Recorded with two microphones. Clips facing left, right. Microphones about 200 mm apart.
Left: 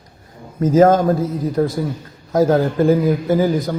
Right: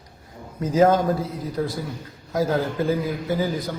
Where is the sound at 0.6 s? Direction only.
45° left (ahead or behind).